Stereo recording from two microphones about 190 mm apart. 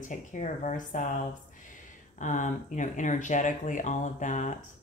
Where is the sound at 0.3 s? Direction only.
40° left (ahead or behind).